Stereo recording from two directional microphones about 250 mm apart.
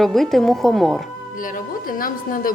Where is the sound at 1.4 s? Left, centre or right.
Left.